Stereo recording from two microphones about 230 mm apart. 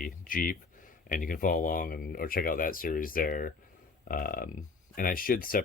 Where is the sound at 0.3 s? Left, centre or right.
Left.